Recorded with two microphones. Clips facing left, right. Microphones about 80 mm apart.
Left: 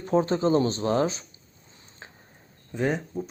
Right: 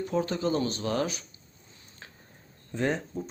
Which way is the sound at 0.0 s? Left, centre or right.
Left.